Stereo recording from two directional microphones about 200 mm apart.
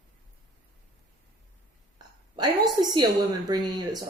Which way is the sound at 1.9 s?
20° right (ahead or behind).